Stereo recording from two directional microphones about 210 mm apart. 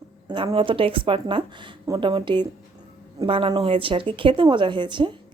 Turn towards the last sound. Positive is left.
turn(degrees=-20)  # may be behind; listen again after turning